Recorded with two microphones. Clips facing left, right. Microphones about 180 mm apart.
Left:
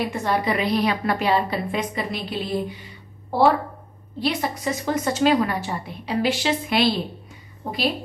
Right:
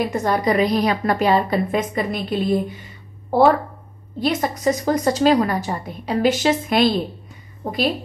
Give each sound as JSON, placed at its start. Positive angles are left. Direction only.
{"t": 0.0, "sound": "a woman's voice", "side_deg": -40}